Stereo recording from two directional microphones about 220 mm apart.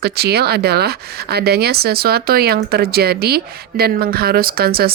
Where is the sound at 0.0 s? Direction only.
45° right (ahead or behind).